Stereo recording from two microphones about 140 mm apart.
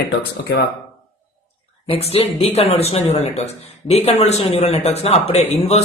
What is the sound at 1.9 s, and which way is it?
Speech, 45° left (ahead or behind).